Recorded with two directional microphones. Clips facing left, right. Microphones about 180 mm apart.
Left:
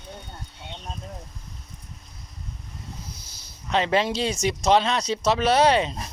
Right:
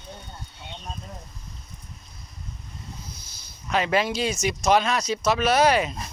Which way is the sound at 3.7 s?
25° left (ahead or behind).